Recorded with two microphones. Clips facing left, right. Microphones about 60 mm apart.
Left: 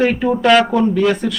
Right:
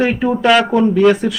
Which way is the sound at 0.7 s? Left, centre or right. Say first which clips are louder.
Right 3 dB; centre.